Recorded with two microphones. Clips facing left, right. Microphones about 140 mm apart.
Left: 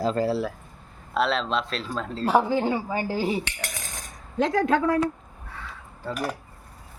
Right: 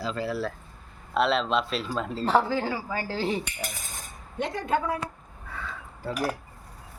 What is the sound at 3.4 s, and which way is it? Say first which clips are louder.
Cutlery: left 1 dB; 85° left.